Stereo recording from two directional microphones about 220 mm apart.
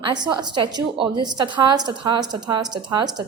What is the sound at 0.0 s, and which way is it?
A woman's voice, 20° right (ahead or behind).